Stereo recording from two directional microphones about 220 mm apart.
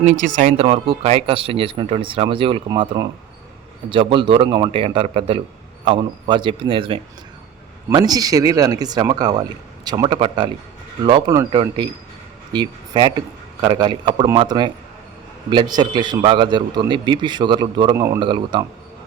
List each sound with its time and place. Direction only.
0.0 s a man's voice: 35° right (ahead or behind)